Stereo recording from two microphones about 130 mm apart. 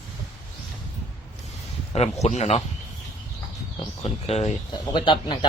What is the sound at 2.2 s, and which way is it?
Speech, 60° left (ahead or behind).